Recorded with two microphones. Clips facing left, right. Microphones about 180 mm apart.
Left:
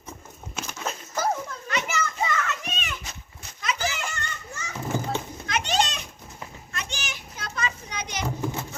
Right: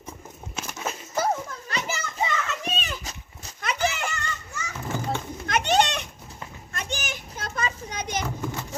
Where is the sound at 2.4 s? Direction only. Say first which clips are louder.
Right 2 dB; 30° right (ahead or behind).